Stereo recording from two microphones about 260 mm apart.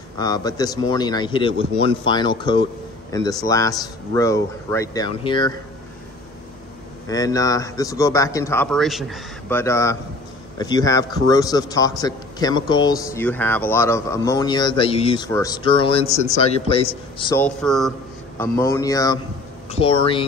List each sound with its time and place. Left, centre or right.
0.2 s speech: centre
7.1 s a man's voice: centre
17.4 s a man's voice: centre